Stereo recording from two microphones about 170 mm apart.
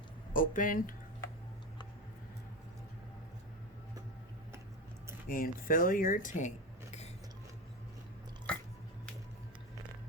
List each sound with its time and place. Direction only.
0.3 s speech: 50° left (ahead or behind)
5.3 s speech: 55° left (ahead or behind)
8.5 s a sound: 5° left (ahead or behind)